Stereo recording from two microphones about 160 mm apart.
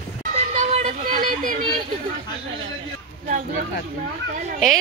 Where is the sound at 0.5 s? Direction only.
45° right (ahead or behind).